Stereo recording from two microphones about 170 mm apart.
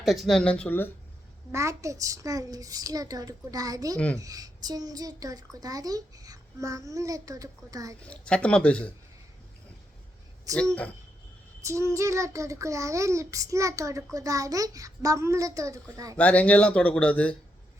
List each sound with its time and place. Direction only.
0.0 s speech: centre (ahead or behind)
1.5 s a child's voice: 20° right (ahead or behind)
3.9 s speech: 5° left (ahead or behind)
4.2 s a child's voice: 20° right (ahead or behind)
8.0 s speech: 5° left (ahead or behind)
10.5 s a child's voice: 20° right (ahead or behind)
16.1 s speech: 10° left (ahead or behind)